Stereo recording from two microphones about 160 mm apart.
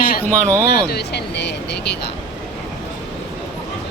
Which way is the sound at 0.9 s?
90° left.